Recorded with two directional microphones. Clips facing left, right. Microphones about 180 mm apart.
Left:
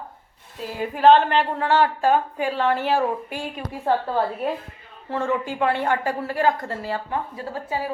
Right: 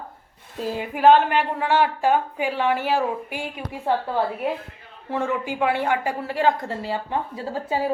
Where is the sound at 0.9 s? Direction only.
10° right (ahead or behind).